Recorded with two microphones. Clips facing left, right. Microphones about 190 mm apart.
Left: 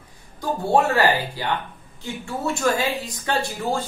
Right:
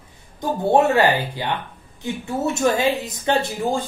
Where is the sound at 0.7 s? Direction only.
20° right (ahead or behind).